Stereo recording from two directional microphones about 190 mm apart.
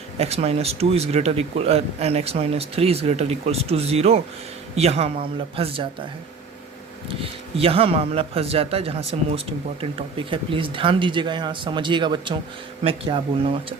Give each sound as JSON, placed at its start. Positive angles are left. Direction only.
{"t": 0.2, "sound": "speech", "side_deg": -35}
{"t": 7.1, "sound": "speech", "side_deg": -30}